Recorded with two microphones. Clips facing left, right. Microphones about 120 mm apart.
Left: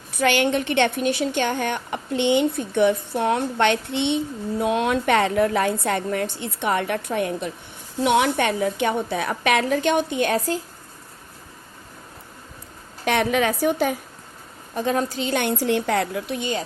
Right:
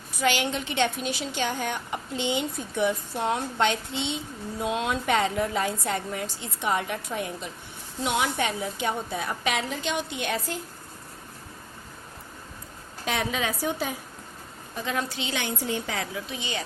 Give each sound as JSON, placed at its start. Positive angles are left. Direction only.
{"t": 0.2, "sound": "a woman's voice", "side_deg": 60}
{"t": 13.1, "sound": "a woman's voice", "side_deg": 60}
{"t": 14.8, "sound": "a woman's voice", "side_deg": 40}
{"t": 15.5, "sound": "a woman's voice", "side_deg": 75}